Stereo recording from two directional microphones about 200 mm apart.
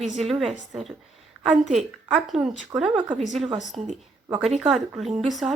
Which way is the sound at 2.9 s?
25° right (ahead or behind).